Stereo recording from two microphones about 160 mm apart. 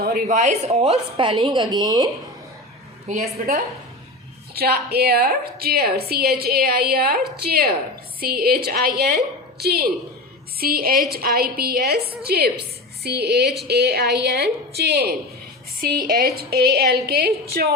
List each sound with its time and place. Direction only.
0.0 s a sound: 70° right (ahead or behind)
0.3 s a woman's voice: 45° right (ahead or behind); by 2.0 s 25° right (ahead or behind)
3.1 s a woman's voice: 50° right (ahead or behind)
4.5 s a woman's voice: 80° right
9.0 s a woman's voice: 85° right
10.6 s a woman's voice: 65° right (ahead or behind)
13.0 s a woman's voice: 90° right
15.8 s a woman's voice: 70° right (ahead or behind); by 17.0 s 85° right
17.1 s a woman's voice: 75° right (ahead or behind)